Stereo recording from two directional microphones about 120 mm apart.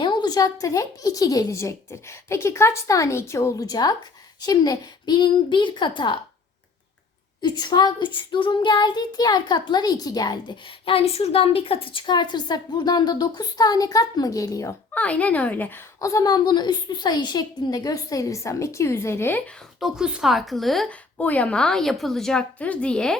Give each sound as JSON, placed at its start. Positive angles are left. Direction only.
{"t": 0.0, "sound": "a woman's voice", "side_deg": 40}
{"t": 4.4, "sound": "child singing", "side_deg": 35}
{"t": 7.4, "sound": "child singing", "side_deg": 35}
{"t": 14.9, "sound": "a woman's voice", "side_deg": 10}
{"t": 16.0, "sound": "a woman's voice", "side_deg": 25}
{"t": 19.8, "sound": "a woman's voice", "side_deg": -5}